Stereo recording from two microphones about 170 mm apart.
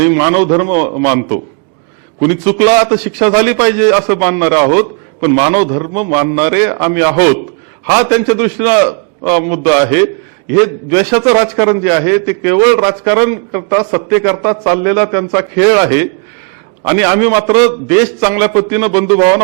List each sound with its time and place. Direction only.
0.0 s a man's voice: 15° right (ahead or behind)
0.4 s a man's voice: 25° right (ahead or behind)
1.0 s a man's voice: 15° right (ahead or behind)
5.9 s a man's voice: 15° right (ahead or behind)